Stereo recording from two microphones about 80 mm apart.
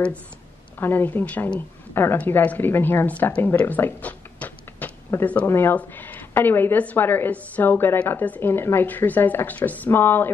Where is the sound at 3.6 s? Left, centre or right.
Left.